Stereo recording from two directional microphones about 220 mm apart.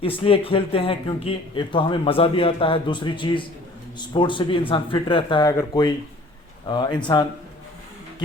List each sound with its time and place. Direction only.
0.0 s speech: 25° left (ahead or behind)